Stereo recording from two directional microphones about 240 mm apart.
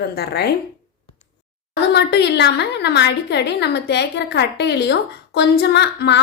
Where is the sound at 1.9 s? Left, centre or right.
Left.